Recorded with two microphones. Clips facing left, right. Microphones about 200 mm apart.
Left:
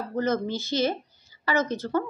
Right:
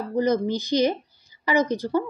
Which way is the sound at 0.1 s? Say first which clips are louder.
Right 4 dB; 15° right (ahead or behind).